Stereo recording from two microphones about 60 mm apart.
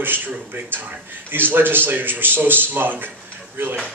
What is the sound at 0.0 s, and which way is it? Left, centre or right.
A man's voice, right.